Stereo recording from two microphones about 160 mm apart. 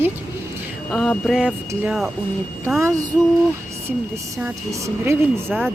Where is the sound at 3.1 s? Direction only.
20° right (ahead or behind).